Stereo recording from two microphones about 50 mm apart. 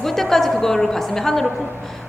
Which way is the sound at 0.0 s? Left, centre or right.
Centre.